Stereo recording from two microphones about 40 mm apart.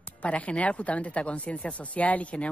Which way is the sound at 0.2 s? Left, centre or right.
Left.